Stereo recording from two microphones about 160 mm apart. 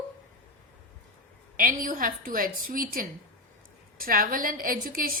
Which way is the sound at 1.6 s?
60° right (ahead or behind).